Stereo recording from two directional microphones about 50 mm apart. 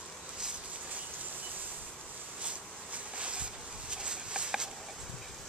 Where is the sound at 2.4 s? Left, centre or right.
Right.